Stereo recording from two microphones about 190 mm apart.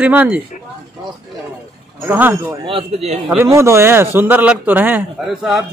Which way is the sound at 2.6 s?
30° right (ahead or behind).